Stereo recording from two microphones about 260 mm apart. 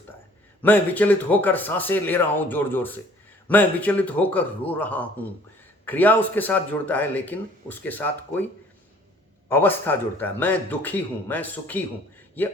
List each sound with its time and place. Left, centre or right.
0.6 s a man's voice: centre
9.5 s a man's voice: centre